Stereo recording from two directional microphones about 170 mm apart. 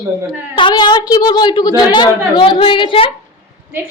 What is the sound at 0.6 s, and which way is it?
A woman's voice, 30° left (ahead or behind).